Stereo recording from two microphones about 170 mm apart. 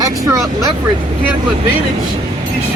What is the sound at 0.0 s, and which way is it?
Speech, 20° right (ahead or behind).